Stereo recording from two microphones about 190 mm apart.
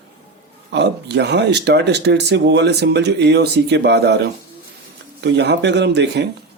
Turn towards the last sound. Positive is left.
turn(degrees=-65)  # may be behind; listen again after turning